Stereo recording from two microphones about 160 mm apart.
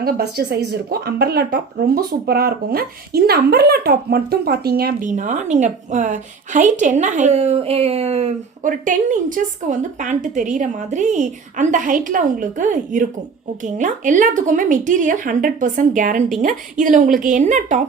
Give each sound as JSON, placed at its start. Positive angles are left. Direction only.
{"t": 0.0, "sound": "speech", "side_deg": -75}
{"t": 5.0, "sound": "a woman's voice", "side_deg": -50}